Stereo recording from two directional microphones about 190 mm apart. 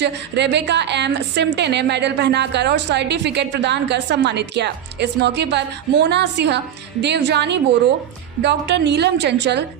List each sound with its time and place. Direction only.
0.0 s a woman's voice: 65° right (ahead or behind)